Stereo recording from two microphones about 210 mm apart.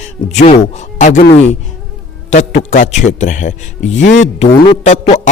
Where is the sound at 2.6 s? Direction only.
35° left (ahead or behind).